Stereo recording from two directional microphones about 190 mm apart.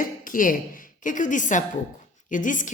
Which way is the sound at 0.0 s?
45° left (ahead or behind).